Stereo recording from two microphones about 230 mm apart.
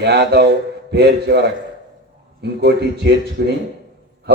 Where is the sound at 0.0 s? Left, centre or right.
Right.